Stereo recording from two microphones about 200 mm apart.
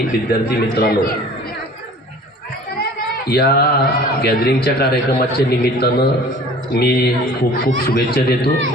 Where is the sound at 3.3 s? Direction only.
50° left (ahead or behind).